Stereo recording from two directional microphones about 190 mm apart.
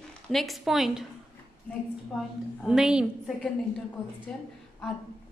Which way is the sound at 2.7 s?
5° right (ahead or behind).